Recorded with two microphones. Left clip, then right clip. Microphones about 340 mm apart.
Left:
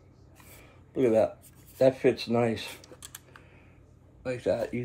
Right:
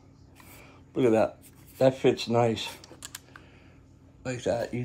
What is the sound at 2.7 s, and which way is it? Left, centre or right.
Computer keyboard, centre.